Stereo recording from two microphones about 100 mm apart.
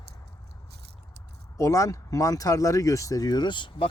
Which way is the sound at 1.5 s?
35° left (ahead or behind).